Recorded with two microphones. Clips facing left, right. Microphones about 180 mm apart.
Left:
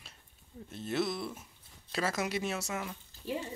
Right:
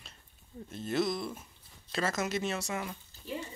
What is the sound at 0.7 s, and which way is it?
Speech, 5° left (ahead or behind).